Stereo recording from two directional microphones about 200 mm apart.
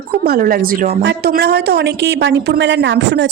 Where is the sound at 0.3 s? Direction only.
45° right (ahead or behind).